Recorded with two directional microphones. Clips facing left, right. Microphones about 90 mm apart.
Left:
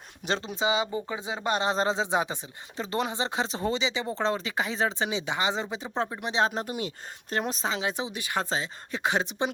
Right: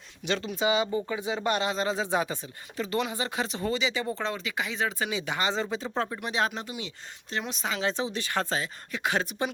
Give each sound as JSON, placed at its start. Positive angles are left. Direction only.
{"t": 0.3, "sound": "speech", "side_deg": 30}
{"t": 2.0, "sound": "speech", "side_deg": 20}
{"t": 4.2, "sound": "speech", "side_deg": 35}
{"t": 6.6, "sound": "speech", "side_deg": 45}
{"t": 7.7, "sound": "speech", "side_deg": 15}